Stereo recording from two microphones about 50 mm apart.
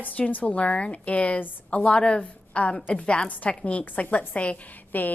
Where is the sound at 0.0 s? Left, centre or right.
Left.